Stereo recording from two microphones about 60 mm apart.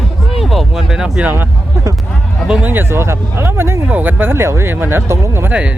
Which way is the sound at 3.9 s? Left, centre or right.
Right.